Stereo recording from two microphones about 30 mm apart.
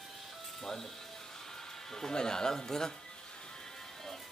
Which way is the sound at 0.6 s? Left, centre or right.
Centre.